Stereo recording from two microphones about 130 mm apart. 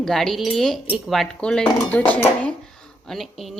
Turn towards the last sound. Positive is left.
turn(degrees=0)  # may be behind; listen again after turning